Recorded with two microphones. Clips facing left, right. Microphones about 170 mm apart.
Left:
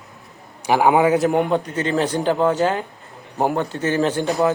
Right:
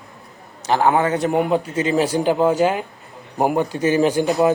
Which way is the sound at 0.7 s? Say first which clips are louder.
Left 2 dB; 10° left (ahead or behind).